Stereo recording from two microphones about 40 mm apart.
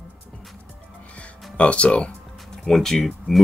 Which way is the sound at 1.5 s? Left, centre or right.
Left.